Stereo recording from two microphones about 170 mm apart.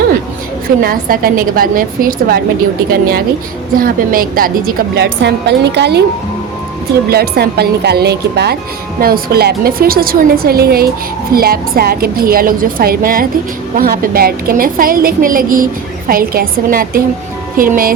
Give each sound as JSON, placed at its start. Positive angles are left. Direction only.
{"t": 0.8, "sound": "a woman's voice", "side_deg": -60}
{"t": 7.1, "sound": "a woman's voice", "side_deg": -70}
{"t": 9.0, "sound": "a woman's voice", "side_deg": -60}